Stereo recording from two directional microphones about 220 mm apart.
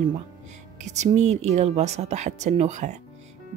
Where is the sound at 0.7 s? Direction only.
30° right (ahead or behind).